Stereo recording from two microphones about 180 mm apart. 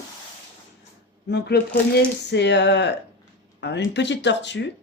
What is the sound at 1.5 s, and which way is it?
Speech, 65° left (ahead or behind).